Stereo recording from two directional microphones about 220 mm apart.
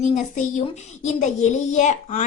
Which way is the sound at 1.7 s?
35° left (ahead or behind).